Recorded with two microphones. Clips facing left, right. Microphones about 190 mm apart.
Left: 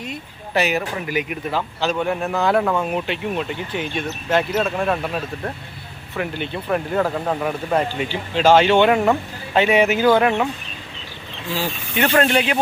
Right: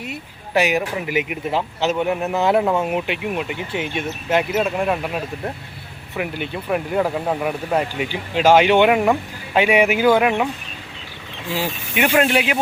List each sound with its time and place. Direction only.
0.0 s speech: 10° right (ahead or behind)
11.5 s speech: 15° right (ahead or behind)